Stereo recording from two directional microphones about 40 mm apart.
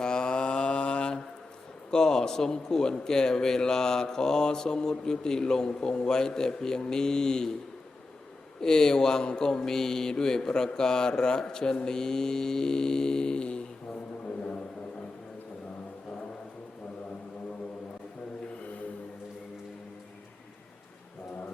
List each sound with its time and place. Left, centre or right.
0.0 s mantra: centre
1.9 s a man's voice: centre
8.6 s a man's voice: centre